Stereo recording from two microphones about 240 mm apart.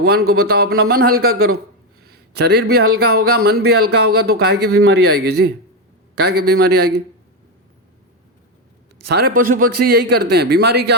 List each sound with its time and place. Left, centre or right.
0.0 s speech: right
2.0 s a sound: right
2.9 s speech: right
9.0 s speech: right